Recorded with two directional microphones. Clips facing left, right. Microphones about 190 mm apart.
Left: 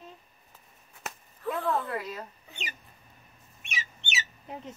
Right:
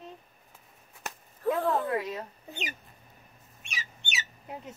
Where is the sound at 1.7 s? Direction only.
20° right (ahead or behind).